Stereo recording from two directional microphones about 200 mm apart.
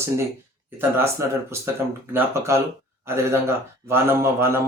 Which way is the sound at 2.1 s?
15° right (ahead or behind).